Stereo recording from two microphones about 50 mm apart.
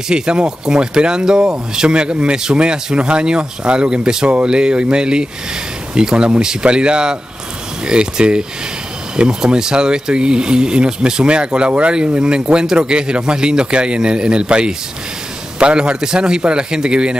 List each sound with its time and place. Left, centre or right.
0.1 s a man's voice: centre